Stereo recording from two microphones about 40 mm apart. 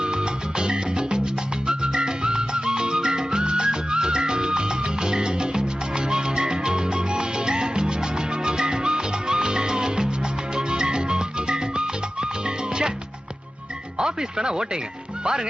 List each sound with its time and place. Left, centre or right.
0.0 s music: right
14.0 s speech: centre
15.2 s music: centre